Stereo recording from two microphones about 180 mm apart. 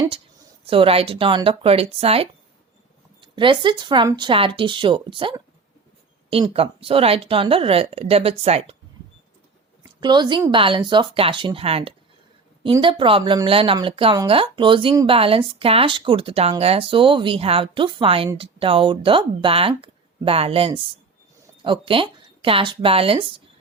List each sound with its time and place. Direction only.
0.6 s speech: 30° right (ahead or behind)
9.8 s speech: 25° right (ahead or behind)